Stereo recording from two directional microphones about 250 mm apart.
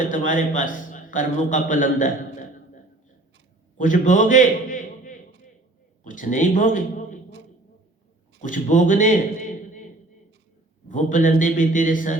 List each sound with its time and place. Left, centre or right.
0.1 s a man's voice: left
3.8 s a man's voice: left
8.4 s a sound: left
10.8 s a man's voice: left